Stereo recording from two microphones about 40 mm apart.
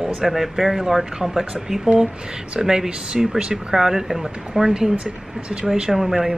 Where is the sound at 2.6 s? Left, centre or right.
Centre.